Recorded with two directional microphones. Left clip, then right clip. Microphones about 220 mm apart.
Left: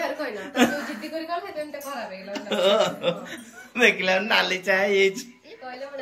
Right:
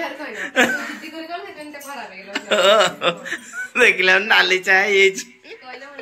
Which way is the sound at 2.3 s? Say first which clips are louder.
Right 7 dB; 5° left (ahead or behind).